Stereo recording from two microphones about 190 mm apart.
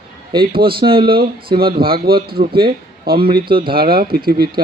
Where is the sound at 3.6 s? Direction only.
50° right (ahead or behind).